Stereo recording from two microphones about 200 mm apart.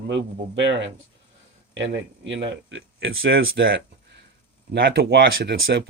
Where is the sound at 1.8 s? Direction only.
65° right (ahead or behind).